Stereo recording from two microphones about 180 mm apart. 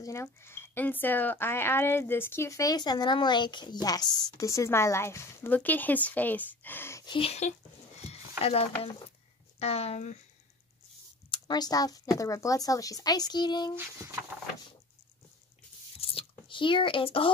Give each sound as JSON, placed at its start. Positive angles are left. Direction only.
{"t": 0.0, "sound": "speech", "side_deg": 15}
{"t": 7.2, "sound": "speech", "side_deg": 35}
{"t": 8.1, "sound": "a sound", "side_deg": 35}
{"t": 9.6, "sound": "speech", "side_deg": 35}
{"t": 11.2, "sound": "speech", "side_deg": 25}
{"t": 13.7, "sound": "speech", "side_deg": -15}
{"t": 16.0, "sound": "a sound", "side_deg": 30}